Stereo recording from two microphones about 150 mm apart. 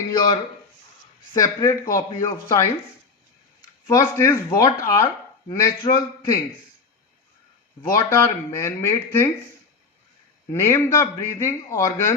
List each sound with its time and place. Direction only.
0.1 s speech: 30° left (ahead or behind)
3.8 s speech: 20° left (ahead or behind)
7.8 s speech: 20° left (ahead or behind)
10.5 s a man's voice: 15° left (ahead or behind)